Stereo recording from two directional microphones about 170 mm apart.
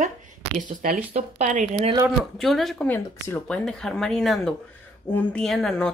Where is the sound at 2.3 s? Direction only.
Centre (ahead or behind).